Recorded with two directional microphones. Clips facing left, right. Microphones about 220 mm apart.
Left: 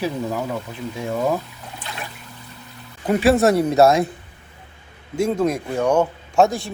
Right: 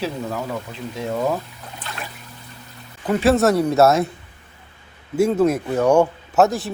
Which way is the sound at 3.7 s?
Centre (ahead or behind).